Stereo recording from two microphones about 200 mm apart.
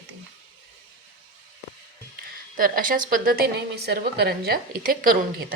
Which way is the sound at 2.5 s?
45° right (ahead or behind).